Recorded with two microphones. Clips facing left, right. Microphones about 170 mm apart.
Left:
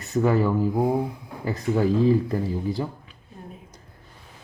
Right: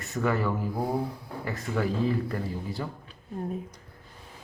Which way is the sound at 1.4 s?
30° left (ahead or behind).